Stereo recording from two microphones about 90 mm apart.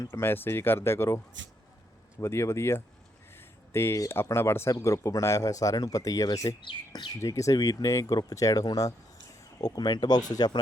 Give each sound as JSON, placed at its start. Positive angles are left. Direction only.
{"t": 0.1, "sound": "speech", "side_deg": 25}
{"t": 2.2, "sound": "speech", "side_deg": 30}
{"t": 3.3, "sound": "a sound", "side_deg": 25}
{"t": 4.1, "sound": "speech", "side_deg": 30}
{"t": 6.6, "sound": "speech", "side_deg": 60}
{"t": 7.1, "sound": "speech", "side_deg": 35}